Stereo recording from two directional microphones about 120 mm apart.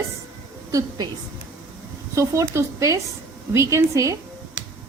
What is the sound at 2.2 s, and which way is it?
A woman's voice, 25° right (ahead or behind).